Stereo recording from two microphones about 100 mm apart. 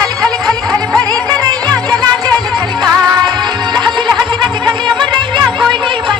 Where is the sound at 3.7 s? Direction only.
45° right (ahead or behind).